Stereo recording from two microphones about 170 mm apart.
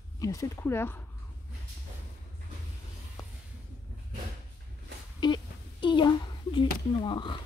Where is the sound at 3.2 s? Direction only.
20° left (ahead or behind).